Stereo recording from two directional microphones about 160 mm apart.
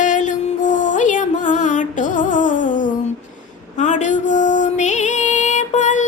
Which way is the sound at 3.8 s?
50° left (ahead or behind).